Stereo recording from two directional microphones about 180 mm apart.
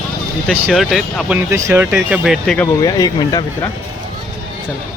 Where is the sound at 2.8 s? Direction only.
20° left (ahead or behind).